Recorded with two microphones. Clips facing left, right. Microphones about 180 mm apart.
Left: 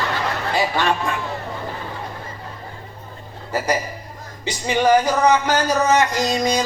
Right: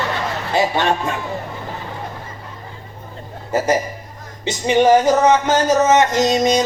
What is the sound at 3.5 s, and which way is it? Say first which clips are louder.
Music: right 4 dB; 25° right (ahead or behind).